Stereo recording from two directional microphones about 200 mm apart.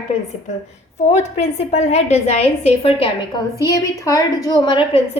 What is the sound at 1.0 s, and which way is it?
A woman's voice, 35° left (ahead or behind).